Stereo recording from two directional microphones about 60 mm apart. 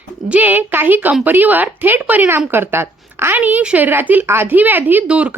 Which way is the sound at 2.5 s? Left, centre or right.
Right.